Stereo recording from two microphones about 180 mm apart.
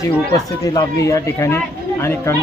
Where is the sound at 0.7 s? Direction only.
15° left (ahead or behind).